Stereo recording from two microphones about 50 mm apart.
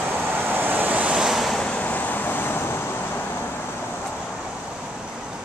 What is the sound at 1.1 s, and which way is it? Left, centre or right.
Waves, centre.